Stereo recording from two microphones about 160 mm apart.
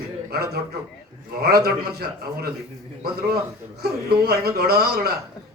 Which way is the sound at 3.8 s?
85° right.